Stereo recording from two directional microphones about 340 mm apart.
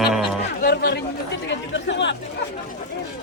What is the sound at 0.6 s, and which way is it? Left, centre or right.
Speech, left.